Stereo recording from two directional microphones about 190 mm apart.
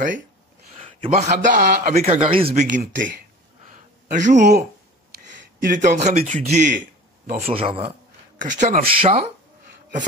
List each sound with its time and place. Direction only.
0.7 s a man's voice: 30° right (ahead or behind)
2.7 s a man's voice: 45° right (ahead or behind)
5.6 s a man's voice: 45° right (ahead or behind)
8.4 s a man's voice: 40° right (ahead or behind)